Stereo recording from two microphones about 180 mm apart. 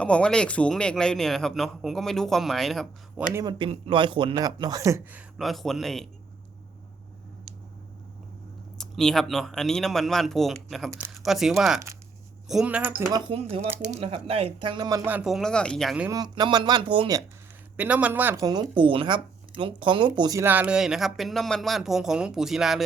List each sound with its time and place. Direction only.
0.0 s speech: 5° left (ahead or behind)
3.3 s a man's voice: 20° right (ahead or behind)
5.4 s speech: centre (ahead or behind)
8.8 s speech: 5° left (ahead or behind); by 13.2 s 15° right (ahead or behind)
13.3 s speech: 35° right (ahead or behind)
13.6 s speech: 10° right (ahead or behind)
13.9 s a man's voice: 30° right (ahead or behind)
15.1 s speech: centre (ahead or behind)
16.0 s a man's voice: 20° right (ahead or behind)
17.7 s speech: 10° right (ahead or behind)
18.4 s speech: 20° right (ahead or behind); by 22.8 s centre (ahead or behind)